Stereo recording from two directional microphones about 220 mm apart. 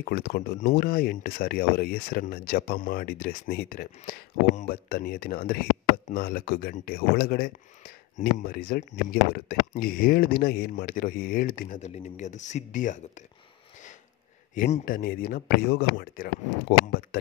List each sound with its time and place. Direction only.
0.0 s speech: 45° left (ahead or behind)
14.5 s speech: 40° left (ahead or behind)